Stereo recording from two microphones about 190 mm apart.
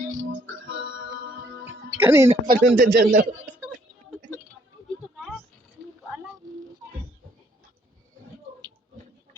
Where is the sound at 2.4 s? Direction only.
50° right (ahead or behind).